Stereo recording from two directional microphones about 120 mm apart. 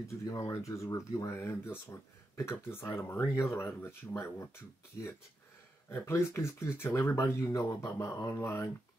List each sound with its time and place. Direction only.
0.2 s speech: 25° left (ahead or behind)
5.9 s speech: 20° left (ahead or behind)